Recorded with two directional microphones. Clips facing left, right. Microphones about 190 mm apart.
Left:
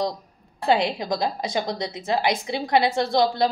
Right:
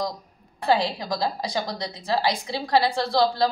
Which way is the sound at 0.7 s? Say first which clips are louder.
Left 1 dB; 20° left (ahead or behind).